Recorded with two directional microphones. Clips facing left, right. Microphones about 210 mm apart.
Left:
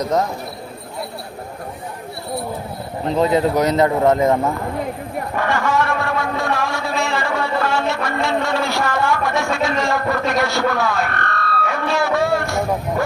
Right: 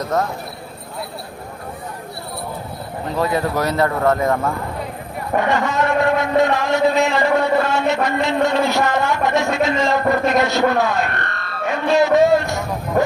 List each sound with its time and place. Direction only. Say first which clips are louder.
0.0 s speech: left 2 dB; 20° left (ahead or behind)
3.2 s speech: left 4 dB; 20° left (ahead or behind)
5.4 s a sound: right 1 dB; 20° right (ahead or behind)